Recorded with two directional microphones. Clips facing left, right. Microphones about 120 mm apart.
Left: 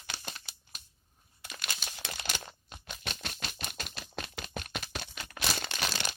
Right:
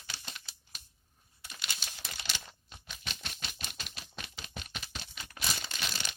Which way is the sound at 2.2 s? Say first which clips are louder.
Left 4 dB; 50° left (ahead or behind).